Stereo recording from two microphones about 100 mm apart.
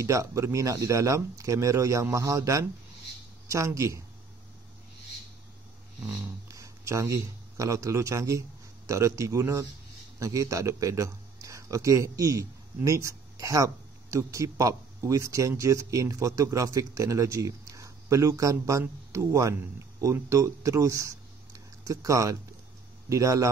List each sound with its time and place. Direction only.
0.0 s speech: 30° right (ahead or behind)
6.0 s a man's voice: 35° right (ahead or behind)